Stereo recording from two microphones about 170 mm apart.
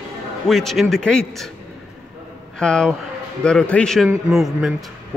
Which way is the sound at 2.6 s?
5° left (ahead or behind).